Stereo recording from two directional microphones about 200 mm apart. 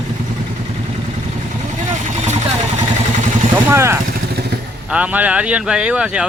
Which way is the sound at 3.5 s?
10° right (ahead or behind).